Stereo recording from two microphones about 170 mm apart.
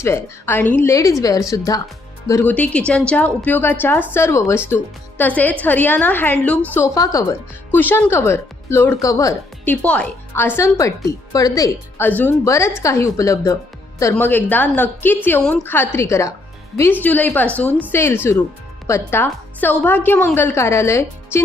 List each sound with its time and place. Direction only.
0.0 s a woman's voice: 15° left (ahead or behind)
9.8 s speech: 10° left (ahead or behind)
17.7 s speech: 10° right (ahead or behind)
17.9 s speech: 15° left (ahead or behind)